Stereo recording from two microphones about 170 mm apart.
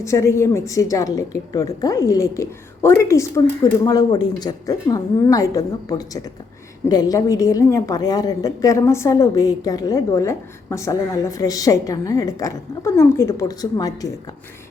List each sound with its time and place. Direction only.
0.0 s a woman's voice: 15° left (ahead or behind)